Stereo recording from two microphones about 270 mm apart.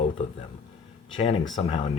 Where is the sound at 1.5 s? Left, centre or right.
Centre.